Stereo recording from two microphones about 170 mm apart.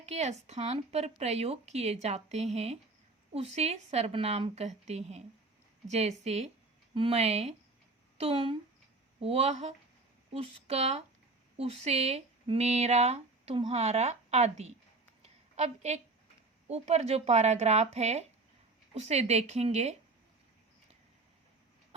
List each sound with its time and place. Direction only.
0.0 s speech: 40° right (ahead or behind)
15.2 s a sound: 40° right (ahead or behind)
16.6 s speech: 40° right (ahead or behind)